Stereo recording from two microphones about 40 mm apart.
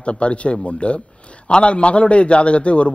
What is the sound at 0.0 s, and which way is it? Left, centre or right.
A man's voice, left.